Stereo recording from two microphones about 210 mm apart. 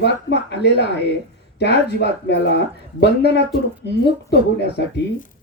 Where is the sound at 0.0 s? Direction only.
55° left (ahead or behind).